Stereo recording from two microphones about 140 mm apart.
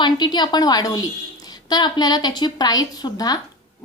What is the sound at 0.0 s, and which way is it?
A woman's voice, 30° left (ahead or behind).